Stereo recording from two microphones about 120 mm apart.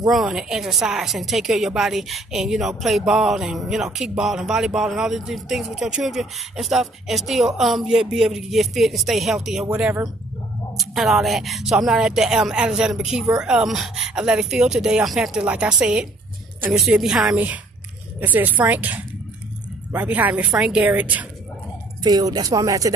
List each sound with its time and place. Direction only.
0.1 s a woman's voice: 5° right (ahead or behind)
22.0 s speech: 35° right (ahead or behind)